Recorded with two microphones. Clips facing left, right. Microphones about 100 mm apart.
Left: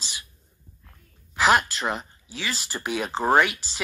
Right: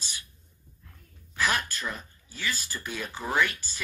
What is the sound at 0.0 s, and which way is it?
Dog, 90° left.